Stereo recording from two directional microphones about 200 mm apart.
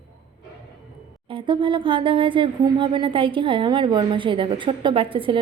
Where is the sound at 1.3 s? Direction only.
25° right (ahead or behind).